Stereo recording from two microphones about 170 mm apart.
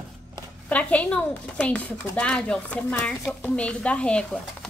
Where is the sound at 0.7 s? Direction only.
10° left (ahead or behind).